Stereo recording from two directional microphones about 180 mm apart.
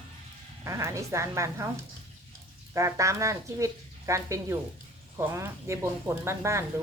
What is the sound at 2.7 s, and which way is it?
Speech, 15° right (ahead or behind).